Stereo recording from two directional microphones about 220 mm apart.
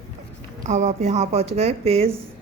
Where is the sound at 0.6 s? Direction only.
30° right (ahead or behind).